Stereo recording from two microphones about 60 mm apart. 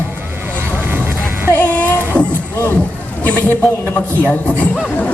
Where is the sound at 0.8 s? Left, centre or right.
Right.